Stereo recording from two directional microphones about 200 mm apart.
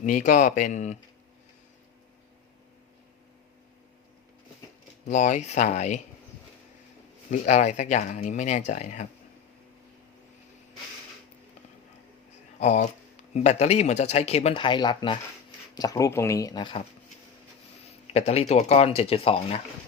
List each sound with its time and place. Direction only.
0.0 s speech: 40° left (ahead or behind)
5.0 s speech: 35° left (ahead or behind)
7.3 s speech: 35° left (ahead or behind)
12.5 s speech: 35° left (ahead or behind)
17.8 s speech: 30° left (ahead or behind)